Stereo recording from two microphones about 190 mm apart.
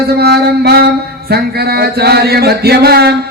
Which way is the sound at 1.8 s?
55° right (ahead or behind).